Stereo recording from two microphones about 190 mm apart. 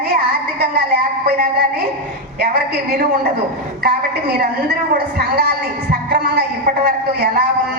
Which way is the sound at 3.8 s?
55° right (ahead or behind).